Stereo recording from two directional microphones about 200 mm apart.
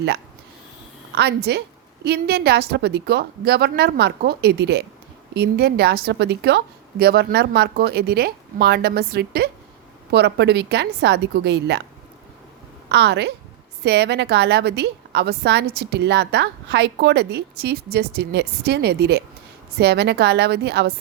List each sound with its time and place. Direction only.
1.1 s a woman's voice: 55° right (ahead or behind)
12.9 s a woman's voice: 60° right (ahead or behind)